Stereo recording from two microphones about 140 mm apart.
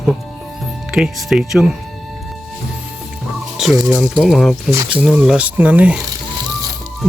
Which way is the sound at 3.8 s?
5° right (ahead or behind).